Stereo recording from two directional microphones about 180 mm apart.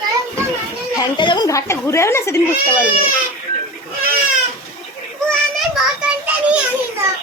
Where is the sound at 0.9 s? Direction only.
25° left (ahead or behind).